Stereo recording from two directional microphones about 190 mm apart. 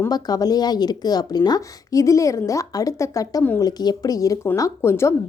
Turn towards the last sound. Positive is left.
turn(degrees=15)  # may be behind; listen again after turning